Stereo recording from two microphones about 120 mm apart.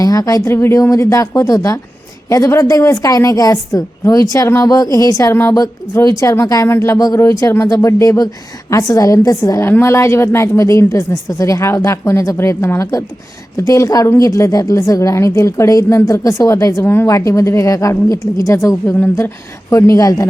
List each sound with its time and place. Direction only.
0.0 s a woman's voice: 30° left (ahead or behind)